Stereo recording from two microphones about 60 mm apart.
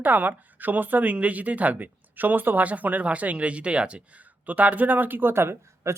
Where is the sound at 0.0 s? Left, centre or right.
Right.